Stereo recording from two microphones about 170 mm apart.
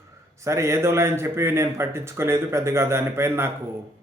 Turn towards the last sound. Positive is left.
turn(degrees=-15)  # may be behind; listen again after turning